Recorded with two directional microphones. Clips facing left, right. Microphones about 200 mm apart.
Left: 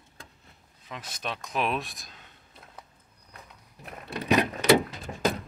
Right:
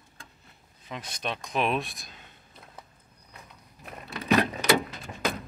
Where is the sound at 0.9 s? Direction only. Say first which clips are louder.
Right 2 dB; 5° left (ahead or behind).